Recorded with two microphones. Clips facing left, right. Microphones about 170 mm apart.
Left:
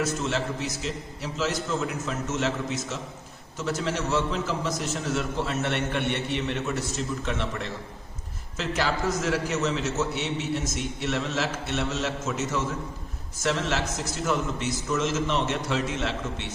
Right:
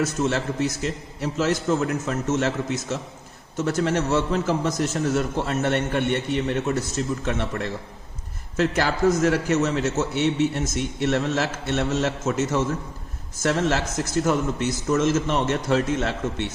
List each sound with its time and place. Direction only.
0.0 s a man's voice: 50° right (ahead or behind)
3.6 s a man's voice: 50° right (ahead or behind)